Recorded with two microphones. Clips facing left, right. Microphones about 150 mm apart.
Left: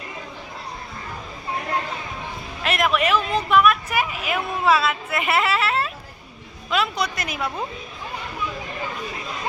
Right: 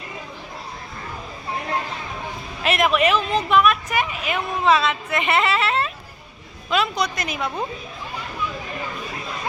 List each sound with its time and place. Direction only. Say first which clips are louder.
2.6 s a woman's voice: right 2 dB; centre (ahead or behind)